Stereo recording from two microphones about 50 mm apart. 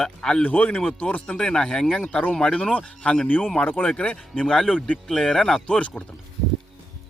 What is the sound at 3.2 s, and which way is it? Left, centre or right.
Speech, left.